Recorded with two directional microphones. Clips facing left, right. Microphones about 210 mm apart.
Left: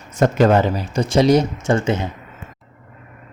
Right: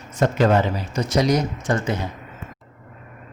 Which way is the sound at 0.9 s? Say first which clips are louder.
Left 5 dB; 30° left (ahead or behind).